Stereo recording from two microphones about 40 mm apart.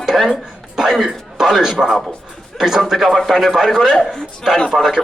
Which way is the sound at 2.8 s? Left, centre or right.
Centre.